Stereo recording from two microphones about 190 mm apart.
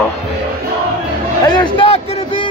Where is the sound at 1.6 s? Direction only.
25° left (ahead or behind).